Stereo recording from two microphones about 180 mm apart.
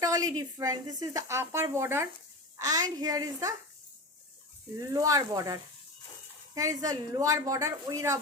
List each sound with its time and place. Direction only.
0.0 s a woman's voice: 20° right (ahead or behind)
4.9 s a woman's voice: 20° right (ahead or behind)